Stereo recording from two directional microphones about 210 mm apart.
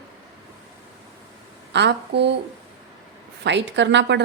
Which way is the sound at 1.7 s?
55° right (ahead or behind).